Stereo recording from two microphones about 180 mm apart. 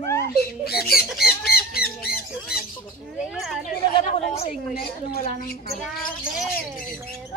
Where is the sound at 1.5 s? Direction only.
60° left (ahead or behind).